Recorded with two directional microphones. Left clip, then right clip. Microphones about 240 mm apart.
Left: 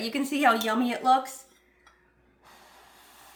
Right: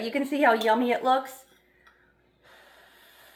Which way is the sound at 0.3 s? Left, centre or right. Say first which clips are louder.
Right 2 dB; left.